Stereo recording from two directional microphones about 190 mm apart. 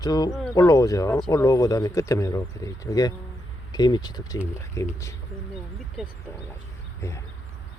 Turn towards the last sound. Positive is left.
turn(degrees=0)  # may be behind; listen again after turning